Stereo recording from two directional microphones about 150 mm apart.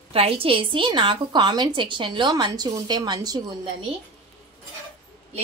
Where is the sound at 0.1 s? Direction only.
40° right (ahead or behind).